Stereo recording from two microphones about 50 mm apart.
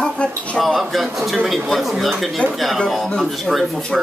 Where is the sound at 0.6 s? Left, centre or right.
Centre.